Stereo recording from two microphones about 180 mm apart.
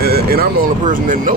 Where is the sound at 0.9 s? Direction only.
50° right (ahead or behind).